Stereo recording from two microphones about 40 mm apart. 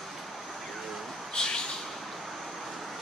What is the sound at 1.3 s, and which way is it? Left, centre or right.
Bird, centre.